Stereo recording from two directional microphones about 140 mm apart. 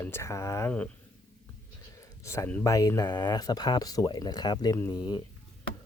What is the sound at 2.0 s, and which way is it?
Speech, 20° left (ahead or behind).